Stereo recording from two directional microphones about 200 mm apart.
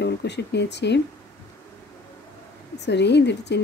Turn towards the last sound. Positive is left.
turn(degrees=60)  # may be behind; listen again after turning